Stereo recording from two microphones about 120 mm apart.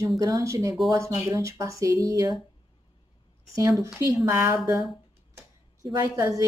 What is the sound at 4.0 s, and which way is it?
Speech, 25° right (ahead or behind).